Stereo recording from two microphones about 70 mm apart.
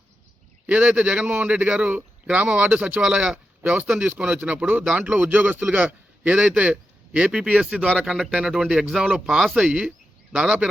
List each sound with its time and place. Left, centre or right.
0.7 s speech: centre
4.9 s speech: right
6.2 s speech: centre
10.3 s speech: centre